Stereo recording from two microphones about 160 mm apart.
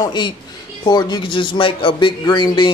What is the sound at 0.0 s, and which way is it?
Speech, 30° left (ahead or behind).